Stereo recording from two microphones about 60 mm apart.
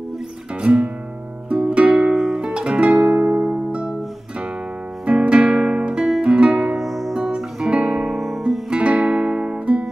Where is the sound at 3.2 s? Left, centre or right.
Right.